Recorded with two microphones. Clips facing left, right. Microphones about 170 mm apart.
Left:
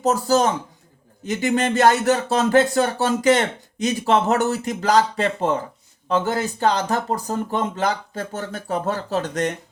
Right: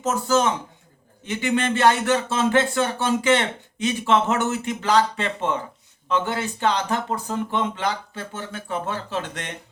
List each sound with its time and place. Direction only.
0.0 s speech: 35° left (ahead or behind)